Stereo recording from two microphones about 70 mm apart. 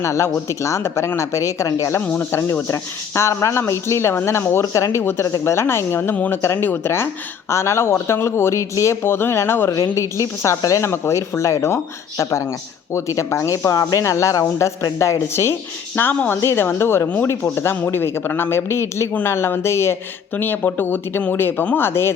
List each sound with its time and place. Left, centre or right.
0.0 s speech: left
4.6 s speech: left
6.4 s speech: left
15.9 s speech: left
20.3 s speech: left